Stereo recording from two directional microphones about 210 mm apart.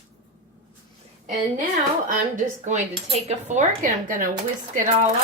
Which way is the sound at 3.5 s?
35° right (ahead or behind).